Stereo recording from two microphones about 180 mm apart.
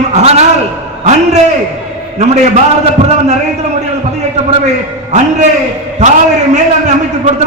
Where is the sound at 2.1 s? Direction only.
40° right (ahead or behind).